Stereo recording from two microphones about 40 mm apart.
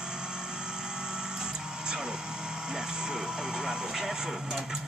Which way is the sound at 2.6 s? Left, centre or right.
Centre.